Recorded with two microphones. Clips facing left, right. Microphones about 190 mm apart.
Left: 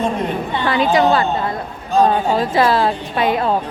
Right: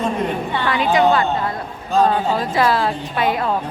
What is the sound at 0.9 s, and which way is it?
Speech, 35° left (ahead or behind).